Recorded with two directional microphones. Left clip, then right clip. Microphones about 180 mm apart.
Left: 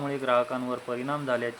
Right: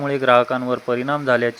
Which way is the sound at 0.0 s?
30° right (ahead or behind).